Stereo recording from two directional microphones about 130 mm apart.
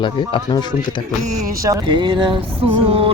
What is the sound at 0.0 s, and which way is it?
Speech, 40° left (ahead or behind).